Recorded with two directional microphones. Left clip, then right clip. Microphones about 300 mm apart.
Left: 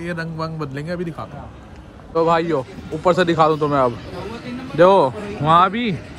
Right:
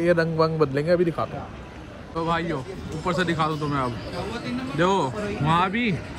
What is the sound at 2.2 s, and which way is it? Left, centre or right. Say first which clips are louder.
Speech: left 9 dB; centre.